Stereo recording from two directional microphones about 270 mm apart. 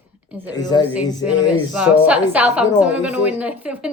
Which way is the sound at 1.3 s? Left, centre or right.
Centre.